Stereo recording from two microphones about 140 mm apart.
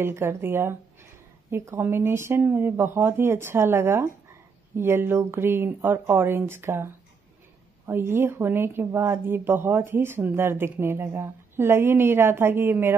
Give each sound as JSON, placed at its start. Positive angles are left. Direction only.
{"t": 0.0, "sound": "speech", "side_deg": -20}